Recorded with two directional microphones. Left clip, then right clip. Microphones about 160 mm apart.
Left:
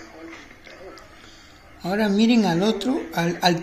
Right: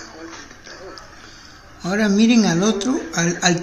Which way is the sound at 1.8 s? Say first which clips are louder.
Right 3 dB; 10° right (ahead or behind).